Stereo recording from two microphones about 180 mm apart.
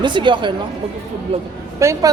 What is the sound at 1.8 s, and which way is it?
Speech, 15° right (ahead or behind).